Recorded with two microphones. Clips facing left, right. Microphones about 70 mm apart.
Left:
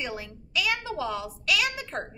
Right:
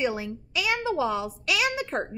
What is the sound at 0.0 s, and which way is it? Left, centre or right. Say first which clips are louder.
A woman's voice: right 7 dB; centre.